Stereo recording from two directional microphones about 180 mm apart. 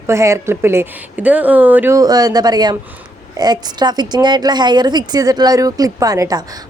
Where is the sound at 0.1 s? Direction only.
15° right (ahead or behind).